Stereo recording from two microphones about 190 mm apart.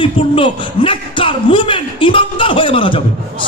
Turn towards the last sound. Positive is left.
turn(degrees=30)  # may be behind; listen again after turning